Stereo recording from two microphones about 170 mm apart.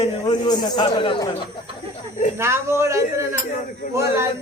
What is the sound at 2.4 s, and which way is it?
Speech, 15° right (ahead or behind).